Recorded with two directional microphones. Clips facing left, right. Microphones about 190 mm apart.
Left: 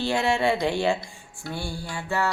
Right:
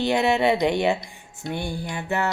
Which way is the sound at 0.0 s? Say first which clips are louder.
Right 3 dB; 20° right (ahead or behind).